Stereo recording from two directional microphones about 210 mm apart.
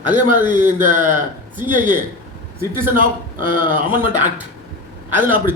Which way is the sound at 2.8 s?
40° right (ahead or behind).